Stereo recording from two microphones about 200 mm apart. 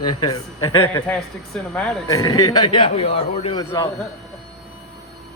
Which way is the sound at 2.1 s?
15° left (ahead or behind).